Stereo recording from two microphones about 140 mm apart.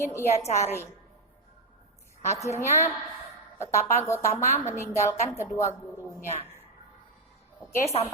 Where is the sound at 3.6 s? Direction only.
20° left (ahead or behind).